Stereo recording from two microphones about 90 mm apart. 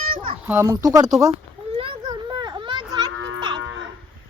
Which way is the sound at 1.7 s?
75° right (ahead or behind).